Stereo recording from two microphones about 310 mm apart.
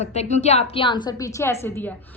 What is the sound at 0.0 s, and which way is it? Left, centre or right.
A woman's voice, left.